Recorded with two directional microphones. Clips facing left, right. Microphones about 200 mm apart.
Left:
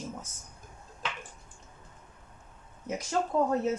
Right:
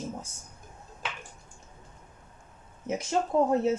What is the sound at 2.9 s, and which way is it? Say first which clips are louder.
Speech: right 3 dB; 25° right (ahead or behind).